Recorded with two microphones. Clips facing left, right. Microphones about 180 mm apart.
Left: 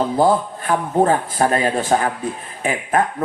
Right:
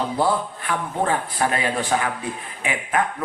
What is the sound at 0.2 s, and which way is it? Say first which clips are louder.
A man's voice: left 6 dB; 45° left (ahead or behind).